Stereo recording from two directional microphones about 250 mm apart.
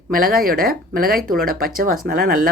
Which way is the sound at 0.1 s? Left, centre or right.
Right.